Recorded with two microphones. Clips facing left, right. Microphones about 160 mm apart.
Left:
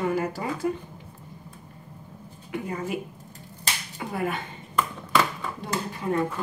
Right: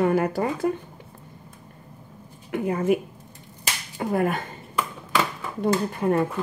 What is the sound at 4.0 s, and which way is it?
Speech, 50° right (ahead or behind).